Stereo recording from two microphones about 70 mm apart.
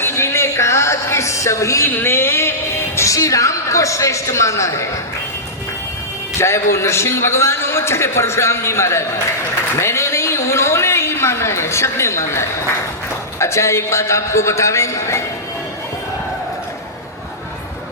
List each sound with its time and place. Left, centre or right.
0.0 s a sound: left
1.9 s speech: left
6.4 s a man's voice: left